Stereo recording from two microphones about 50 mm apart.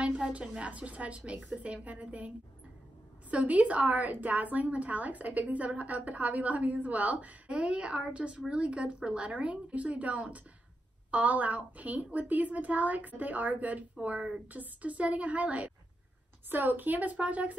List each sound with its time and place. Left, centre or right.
0.0 s a sound: right
0.6 s a woman's voice: right
16.4 s a woman's voice: right